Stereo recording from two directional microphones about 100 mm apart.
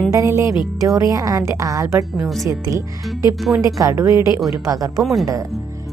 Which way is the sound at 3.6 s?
35° right (ahead or behind).